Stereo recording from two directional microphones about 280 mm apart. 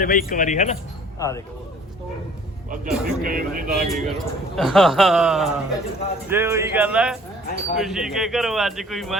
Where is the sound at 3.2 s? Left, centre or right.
Right.